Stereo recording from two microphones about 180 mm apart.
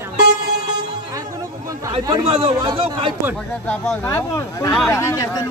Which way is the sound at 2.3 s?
30° right (ahead or behind).